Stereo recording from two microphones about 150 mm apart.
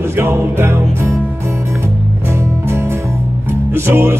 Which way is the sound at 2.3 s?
15° right (ahead or behind).